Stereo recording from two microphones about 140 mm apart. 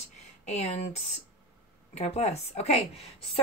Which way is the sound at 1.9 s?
50° left (ahead or behind).